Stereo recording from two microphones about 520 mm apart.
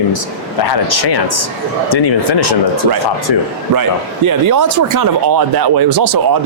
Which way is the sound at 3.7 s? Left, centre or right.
Right.